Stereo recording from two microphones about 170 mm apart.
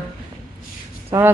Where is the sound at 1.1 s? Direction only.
15° right (ahead or behind).